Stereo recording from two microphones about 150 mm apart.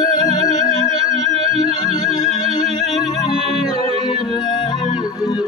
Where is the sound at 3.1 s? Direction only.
25° left (ahead or behind).